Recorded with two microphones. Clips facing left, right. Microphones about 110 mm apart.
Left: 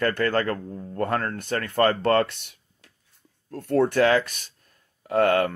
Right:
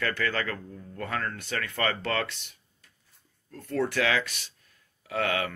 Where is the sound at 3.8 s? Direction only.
40° left (ahead or behind).